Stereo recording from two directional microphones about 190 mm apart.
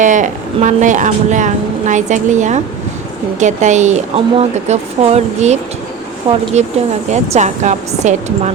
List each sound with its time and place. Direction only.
0.0 s speech: 40° right (ahead or behind)
7.1 s speech: 40° right (ahead or behind)